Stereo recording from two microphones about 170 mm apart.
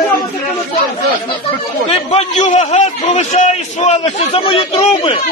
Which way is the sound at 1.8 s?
40° left (ahead or behind).